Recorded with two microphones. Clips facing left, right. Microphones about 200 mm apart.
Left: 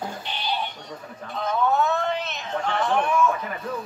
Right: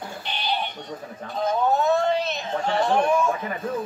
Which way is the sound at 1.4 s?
40° right (ahead or behind).